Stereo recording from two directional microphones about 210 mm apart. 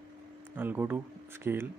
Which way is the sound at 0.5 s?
10° right (ahead or behind).